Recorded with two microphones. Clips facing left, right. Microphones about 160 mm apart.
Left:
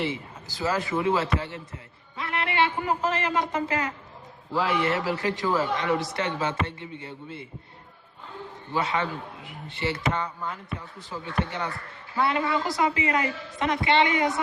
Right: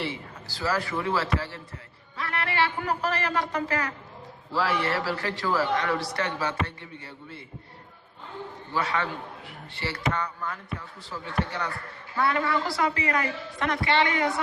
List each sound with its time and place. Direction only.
0.0 s a man's voice: 20° left (ahead or behind)
8.7 s a man's voice: 20° left (ahead or behind)